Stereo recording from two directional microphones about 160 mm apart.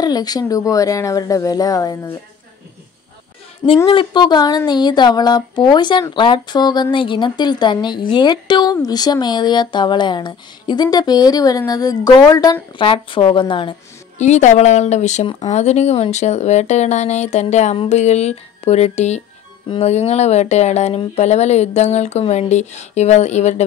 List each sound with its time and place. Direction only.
0.0 s speech: 25° left (ahead or behind)
3.6 s speech: 35° left (ahead or behind)
14.1 s speech: 45° left (ahead or behind)